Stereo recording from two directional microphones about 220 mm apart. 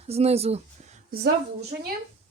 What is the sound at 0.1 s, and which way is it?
Speech, 30° right (ahead or behind).